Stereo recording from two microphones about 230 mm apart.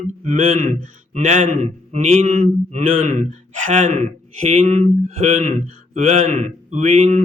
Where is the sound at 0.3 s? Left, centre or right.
Right.